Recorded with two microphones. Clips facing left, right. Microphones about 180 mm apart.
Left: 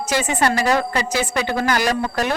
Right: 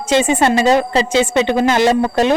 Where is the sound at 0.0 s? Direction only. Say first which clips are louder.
Right 6 dB; 25° right (ahead or behind).